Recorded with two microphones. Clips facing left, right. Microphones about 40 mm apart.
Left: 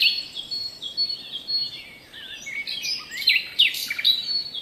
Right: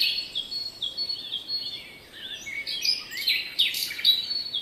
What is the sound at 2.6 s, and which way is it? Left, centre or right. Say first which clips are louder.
Chirp: right 1 dB; left.